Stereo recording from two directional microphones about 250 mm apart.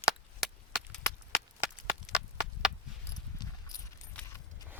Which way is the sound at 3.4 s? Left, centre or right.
Centre.